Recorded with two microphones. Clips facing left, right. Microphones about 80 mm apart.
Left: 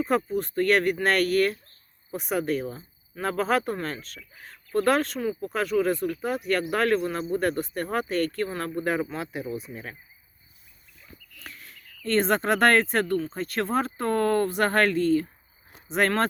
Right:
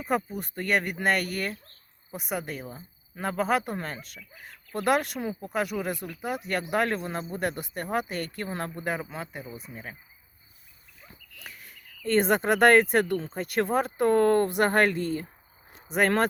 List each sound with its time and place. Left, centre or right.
0.3 s speech: centre
8.9 s speech: centre
11.3 s speech: centre